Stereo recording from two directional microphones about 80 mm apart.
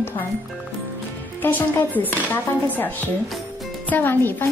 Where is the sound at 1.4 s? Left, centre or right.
Left.